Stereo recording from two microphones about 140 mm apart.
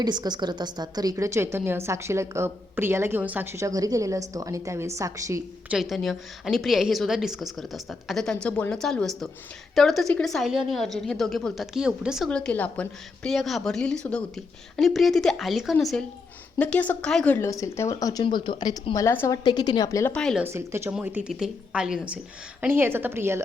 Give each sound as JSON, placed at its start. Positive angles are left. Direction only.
{"t": 0.0, "sound": "a woman's voice", "side_deg": -30}
{"t": 5.6, "sound": "a woman's voice", "side_deg": -5}
{"t": 12.3, "sound": "a woman's voice", "side_deg": 5}
{"t": 17.3, "sound": "speech", "side_deg": 20}
{"t": 19.5, "sound": "speech", "side_deg": 30}
{"t": 20.1, "sound": "a woman's voice", "side_deg": 5}
{"t": 20.4, "sound": "a woman's voice", "side_deg": -20}